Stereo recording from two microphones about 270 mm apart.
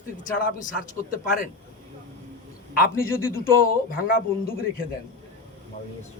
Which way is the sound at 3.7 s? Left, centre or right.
Left.